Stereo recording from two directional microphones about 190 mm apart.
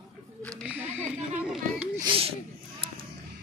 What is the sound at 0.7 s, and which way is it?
Speech, 10° right (ahead or behind).